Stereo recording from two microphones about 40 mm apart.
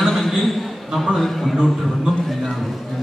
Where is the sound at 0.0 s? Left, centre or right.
Centre.